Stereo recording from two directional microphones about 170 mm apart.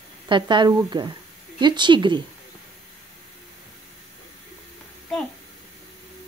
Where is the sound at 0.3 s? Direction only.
25° right (ahead or behind).